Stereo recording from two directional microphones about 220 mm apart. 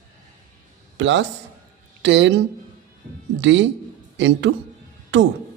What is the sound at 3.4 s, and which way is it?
A man's voice, 55° right (ahead or behind).